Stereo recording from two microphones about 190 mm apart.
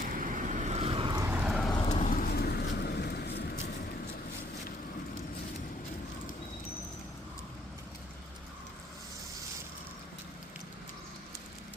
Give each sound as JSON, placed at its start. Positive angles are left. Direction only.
{"t": 0.0, "sound": "vehicle", "side_deg": -45}
{"t": 1.3, "sound": "vehicle", "side_deg": -5}
{"t": 1.9, "sound": "vehicle", "side_deg": 40}